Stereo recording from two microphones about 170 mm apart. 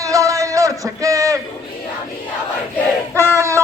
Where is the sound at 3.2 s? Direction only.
15° right (ahead or behind).